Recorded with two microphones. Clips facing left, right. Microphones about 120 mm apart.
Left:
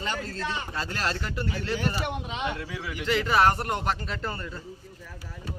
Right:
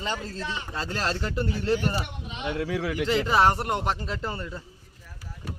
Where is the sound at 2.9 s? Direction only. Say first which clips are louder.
Even; 30° right (ahead or behind).